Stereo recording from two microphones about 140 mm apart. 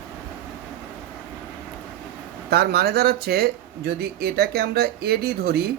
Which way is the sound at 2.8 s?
90° right.